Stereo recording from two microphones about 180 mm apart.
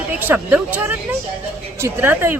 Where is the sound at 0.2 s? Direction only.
10° right (ahead or behind).